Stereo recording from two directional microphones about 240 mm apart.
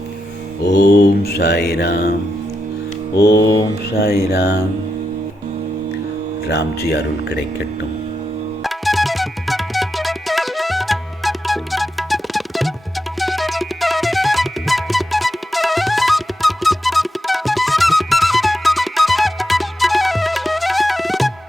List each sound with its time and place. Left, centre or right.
0.6 s mantra: left
3.2 s mantra: left
3.4 s mantra: centre
3.9 s music: left
4.3 s mantra: left
6.5 s mantra: left
8.6 s music: centre